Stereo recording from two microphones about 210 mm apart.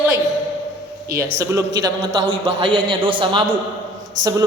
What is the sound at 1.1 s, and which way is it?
Speech, 50° right (ahead or behind).